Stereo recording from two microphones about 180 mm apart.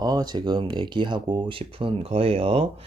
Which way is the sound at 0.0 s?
20° right (ahead or behind).